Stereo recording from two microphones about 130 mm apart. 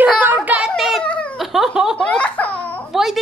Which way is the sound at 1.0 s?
10° left (ahead or behind).